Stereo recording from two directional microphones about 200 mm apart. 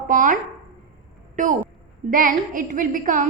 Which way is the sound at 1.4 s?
40° right (ahead or behind).